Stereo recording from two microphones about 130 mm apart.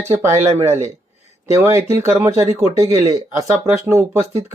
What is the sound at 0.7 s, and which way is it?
Speech, 55° right (ahead or behind).